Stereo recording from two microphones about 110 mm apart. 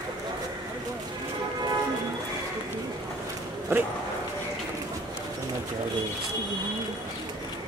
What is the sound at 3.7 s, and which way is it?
Speech, 20° right (ahead or behind).